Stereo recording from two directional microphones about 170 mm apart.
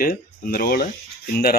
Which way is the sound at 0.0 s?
60° left (ahead or behind).